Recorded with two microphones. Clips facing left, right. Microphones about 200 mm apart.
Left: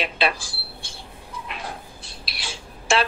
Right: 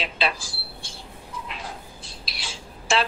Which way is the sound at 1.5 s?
60° left (ahead or behind).